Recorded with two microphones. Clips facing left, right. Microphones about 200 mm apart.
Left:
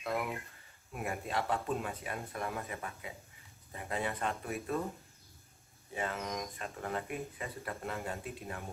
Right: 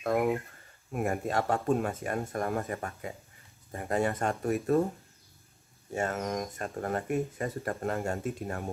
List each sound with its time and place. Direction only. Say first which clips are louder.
0.0 s speech: right 9 dB; 45° right (ahead or behind)
5.9 s speech: right 6 dB; 45° right (ahead or behind)